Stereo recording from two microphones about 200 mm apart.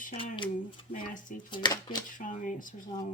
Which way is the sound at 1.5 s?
25° left (ahead or behind).